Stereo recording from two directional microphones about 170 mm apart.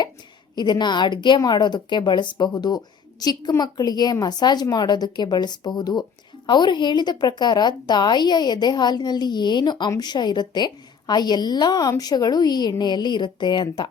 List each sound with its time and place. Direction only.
0.5 s a woman's voice: 25° left (ahead or behind)